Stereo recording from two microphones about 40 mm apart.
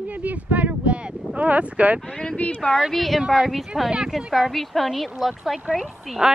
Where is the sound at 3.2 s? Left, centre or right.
Centre.